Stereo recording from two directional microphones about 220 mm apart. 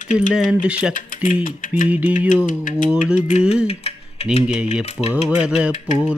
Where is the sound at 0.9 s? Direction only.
35° left (ahead or behind).